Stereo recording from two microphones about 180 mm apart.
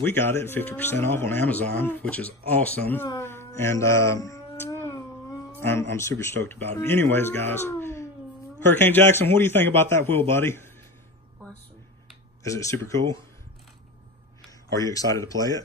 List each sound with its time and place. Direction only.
0.0 s speech: 10° left (ahead or behind)
3.1 s a sound: 15° left (ahead or behind)
5.6 s speech: 15° left (ahead or behind)
12.4 s speech: 15° left (ahead or behind)
14.8 s speech: 20° left (ahead or behind)